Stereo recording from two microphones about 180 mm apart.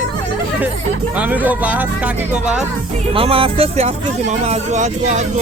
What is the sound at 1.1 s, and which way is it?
Speech, 10° right (ahead or behind).